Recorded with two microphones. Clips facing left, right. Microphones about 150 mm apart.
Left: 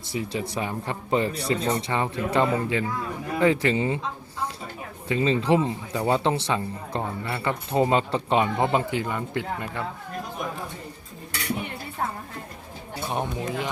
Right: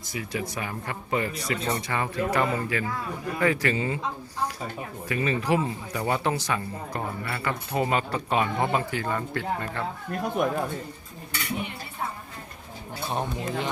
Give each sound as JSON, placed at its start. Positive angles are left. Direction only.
{"t": 0.1, "sound": "speech", "side_deg": 30}
{"t": 5.0, "sound": "speech", "side_deg": 25}
{"t": 10.4, "sound": "speech", "side_deg": -60}
{"t": 13.1, "sound": "speech", "side_deg": 15}